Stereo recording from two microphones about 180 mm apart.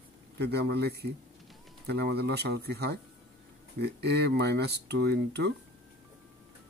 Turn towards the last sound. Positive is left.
turn(degrees=-65)  # may be behind; listen again after turning